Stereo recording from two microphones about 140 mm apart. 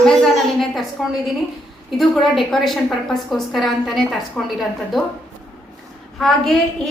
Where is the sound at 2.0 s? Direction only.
Centre (ahead or behind).